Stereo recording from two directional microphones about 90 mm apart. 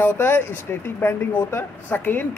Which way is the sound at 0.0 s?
25° left (ahead or behind).